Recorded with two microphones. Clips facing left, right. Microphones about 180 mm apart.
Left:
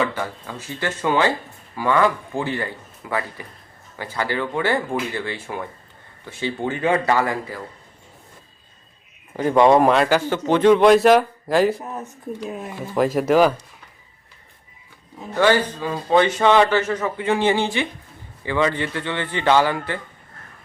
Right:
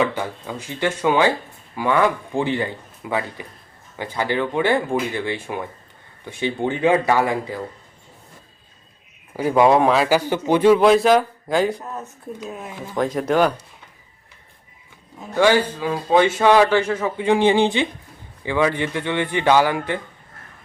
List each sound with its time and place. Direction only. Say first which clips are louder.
0.0 s a man's voice: right 2 dB; 15° right (ahead or behind)
9.3 s a man's voice: left 1 dB; 5° right (ahead or behind)
11.8 s speech: left 1 dB; 15° left (ahead or behind)
12.5 s a man's voice: left 2 dB; 5° left (ahead or behind)
15.4 s a man's voice: right 1 dB; 10° right (ahead or behind)